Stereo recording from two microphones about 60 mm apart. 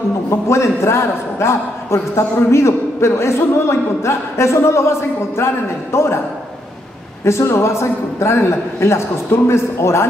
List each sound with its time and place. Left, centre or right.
0.3 s a man's voice: left
7.2 s a man's voice: left